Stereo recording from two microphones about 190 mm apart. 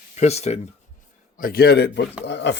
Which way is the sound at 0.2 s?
35° left (ahead or behind).